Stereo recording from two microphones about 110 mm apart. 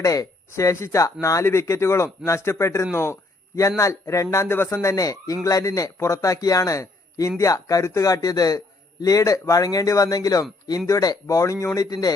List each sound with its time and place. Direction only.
0.0 s speech: 30° left (ahead or behind)